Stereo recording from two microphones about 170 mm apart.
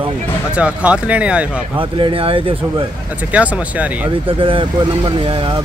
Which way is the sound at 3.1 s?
10° right (ahead or behind).